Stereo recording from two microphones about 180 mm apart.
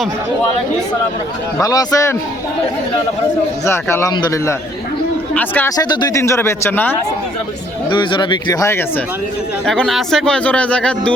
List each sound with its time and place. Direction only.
1.5 s speech: 20° left (ahead or behind)
3.7 s speech: 15° left (ahead or behind)
5.7 s speech: 25° left (ahead or behind)
7.9 s speech: 25° left (ahead or behind)
9.6 s speech: centre (ahead or behind)